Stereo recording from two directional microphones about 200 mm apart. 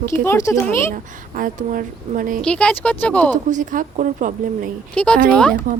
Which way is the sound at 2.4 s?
5° left (ahead or behind).